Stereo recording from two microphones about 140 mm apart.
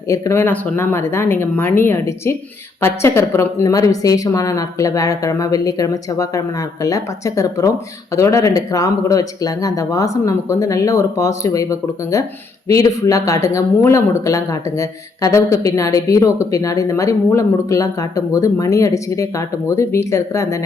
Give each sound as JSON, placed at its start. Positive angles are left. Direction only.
{"t": 0.1, "sound": "speech", "side_deg": 20}